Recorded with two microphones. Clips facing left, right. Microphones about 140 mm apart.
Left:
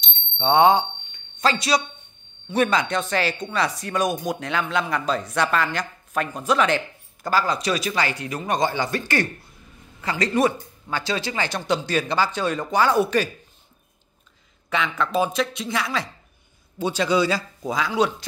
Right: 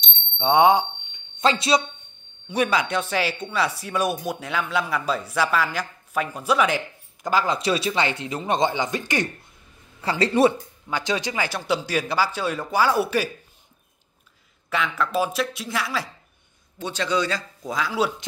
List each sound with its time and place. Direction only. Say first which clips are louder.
0.4 s speech: even; 10° right (ahead or behind)
2.4 s speech: left 1 dB; 10° right (ahead or behind)
7.2 s speech: even; 20° right (ahead or behind)
10.0 s speech: right 2 dB; 30° right (ahead or behind)
10.9 s speech: right 1 dB; 15° right (ahead or behind)
14.7 s speech: left 1 dB; 5° right (ahead or behind)
16.7 s speech: left 4 dB; 10° left (ahead or behind)